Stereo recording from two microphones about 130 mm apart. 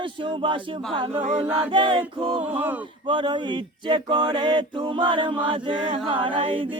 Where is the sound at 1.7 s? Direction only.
40° right (ahead or behind).